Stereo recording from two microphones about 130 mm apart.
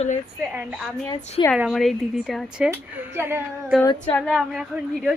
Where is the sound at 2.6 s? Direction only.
15° right (ahead or behind).